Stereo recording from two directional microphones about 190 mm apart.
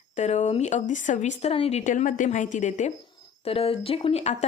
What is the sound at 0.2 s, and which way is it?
A woman's voice, 35° left (ahead or behind).